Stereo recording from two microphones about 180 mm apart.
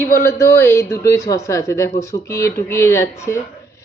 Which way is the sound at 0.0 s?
15° left (ahead or behind).